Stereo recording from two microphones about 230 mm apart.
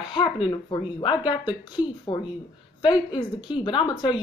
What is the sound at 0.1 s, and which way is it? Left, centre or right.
Speech, centre.